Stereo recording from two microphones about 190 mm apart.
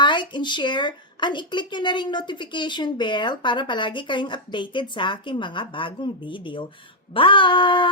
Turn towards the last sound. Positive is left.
turn(degrees=25)  # may be behind; listen again after turning